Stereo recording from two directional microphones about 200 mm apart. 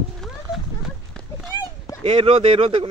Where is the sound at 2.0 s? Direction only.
25° right (ahead or behind).